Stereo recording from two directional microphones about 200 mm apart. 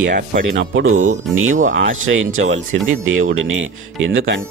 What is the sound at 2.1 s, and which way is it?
Speech, 85° right.